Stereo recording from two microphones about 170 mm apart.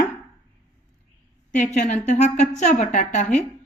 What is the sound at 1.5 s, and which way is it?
A woman's voice, 45° left (ahead or behind).